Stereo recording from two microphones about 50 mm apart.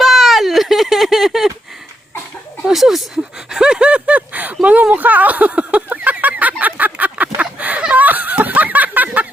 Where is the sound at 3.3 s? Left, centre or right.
Centre; by 9.2 s right.